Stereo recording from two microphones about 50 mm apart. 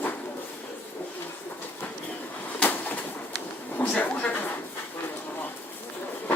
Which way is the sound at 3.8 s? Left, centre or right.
Left.